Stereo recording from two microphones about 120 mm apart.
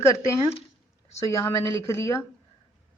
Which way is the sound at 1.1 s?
25° left (ahead or behind).